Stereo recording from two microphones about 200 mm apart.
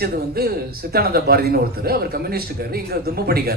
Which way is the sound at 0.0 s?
50° right (ahead or behind).